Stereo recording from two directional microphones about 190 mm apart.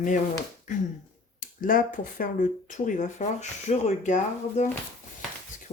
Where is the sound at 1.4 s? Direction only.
45° left (ahead or behind).